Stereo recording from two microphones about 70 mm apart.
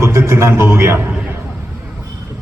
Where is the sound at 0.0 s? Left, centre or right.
Right.